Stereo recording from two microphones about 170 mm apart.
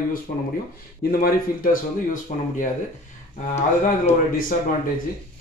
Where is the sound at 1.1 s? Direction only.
55° left (ahead or behind).